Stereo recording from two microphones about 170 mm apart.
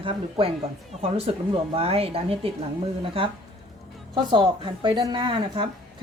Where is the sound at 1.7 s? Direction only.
35° right (ahead or behind).